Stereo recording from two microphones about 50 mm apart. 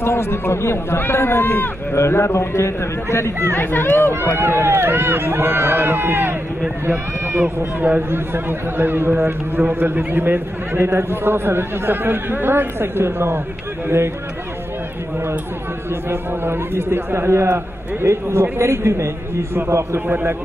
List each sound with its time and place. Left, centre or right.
0.0 s speech: left
2.0 s speech: left
3.5 s speech: left
4.4 s a man's voice: right
6.9 s speech: right
8.1 s a man's voice: right
16.1 s a man's voice: right